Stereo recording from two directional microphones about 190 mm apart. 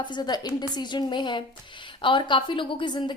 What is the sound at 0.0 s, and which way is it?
A woman's voice, 20° left (ahead or behind).